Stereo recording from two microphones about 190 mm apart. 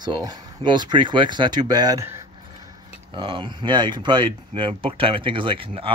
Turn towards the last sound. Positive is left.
turn(degrees=-25)  # may be behind; listen again after turning